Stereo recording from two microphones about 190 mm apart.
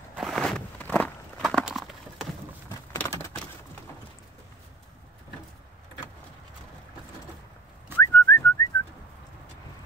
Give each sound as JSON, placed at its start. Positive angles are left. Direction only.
{"t": 0.1, "sound": "walk", "side_deg": 0}
{"t": 1.4, "sound": "horse", "side_deg": -5}
{"t": 2.7, "sound": "a sound", "side_deg": 15}
{"t": 8.0, "sound": "whistling", "side_deg": 15}